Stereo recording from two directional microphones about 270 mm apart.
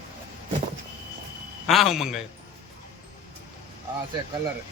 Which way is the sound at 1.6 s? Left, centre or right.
Centre.